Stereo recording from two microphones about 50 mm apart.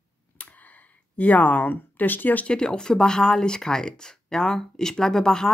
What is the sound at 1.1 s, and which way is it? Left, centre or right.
Speech, left.